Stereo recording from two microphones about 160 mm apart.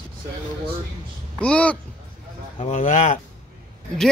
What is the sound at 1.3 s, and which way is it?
Speech, 10° left (ahead or behind).